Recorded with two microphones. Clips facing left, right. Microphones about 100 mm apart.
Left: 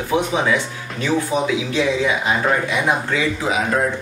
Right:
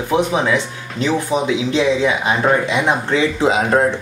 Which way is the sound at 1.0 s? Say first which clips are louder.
Right 2 dB; 20° right (ahead or behind).